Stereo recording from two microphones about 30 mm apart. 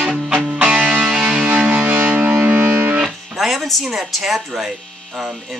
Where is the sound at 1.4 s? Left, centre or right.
Right.